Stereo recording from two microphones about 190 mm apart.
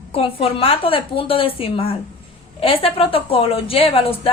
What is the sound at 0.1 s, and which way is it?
A woman's voice, 30° left (ahead or behind).